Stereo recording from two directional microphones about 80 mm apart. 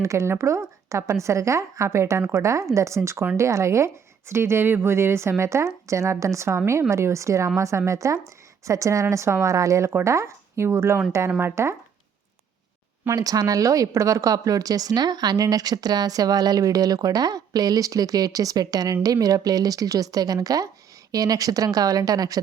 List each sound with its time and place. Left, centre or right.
0.0 s a woman's voice: right
13.1 s a woman's voice: right